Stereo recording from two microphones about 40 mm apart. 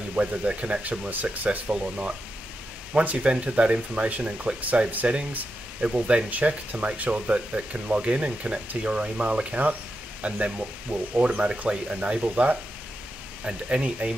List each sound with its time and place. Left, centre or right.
0.1 s speech: right
2.9 s speech: right
5.9 s speech: right
6.3 s speech: right